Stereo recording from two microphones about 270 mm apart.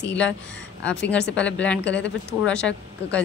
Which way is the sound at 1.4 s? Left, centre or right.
Centre.